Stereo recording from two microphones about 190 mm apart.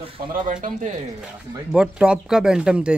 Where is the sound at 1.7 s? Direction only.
5° right (ahead or behind).